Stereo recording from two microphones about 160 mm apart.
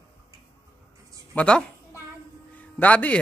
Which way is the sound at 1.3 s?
5° left (ahead or behind).